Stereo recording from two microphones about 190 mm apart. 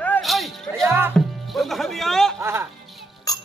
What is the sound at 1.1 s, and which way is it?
Music, centre (ahead or behind).